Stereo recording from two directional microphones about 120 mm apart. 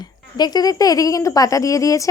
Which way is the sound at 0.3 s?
35° left (ahead or behind).